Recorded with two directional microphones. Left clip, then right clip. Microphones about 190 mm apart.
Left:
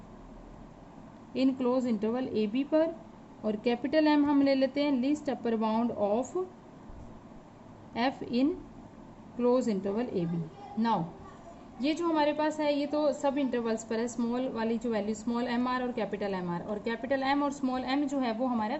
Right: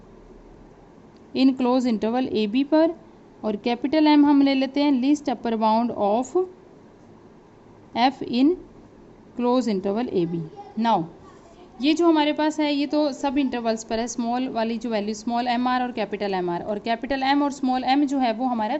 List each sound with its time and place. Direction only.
1.3 s a woman's voice: 45° right (ahead or behind)
7.9 s a woman's voice: 45° right (ahead or behind)